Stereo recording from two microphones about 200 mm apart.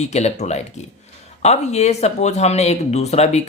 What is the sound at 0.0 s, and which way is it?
Speech, 35° left (ahead or behind).